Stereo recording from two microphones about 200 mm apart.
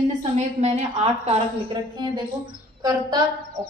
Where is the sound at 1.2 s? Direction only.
20° right (ahead or behind).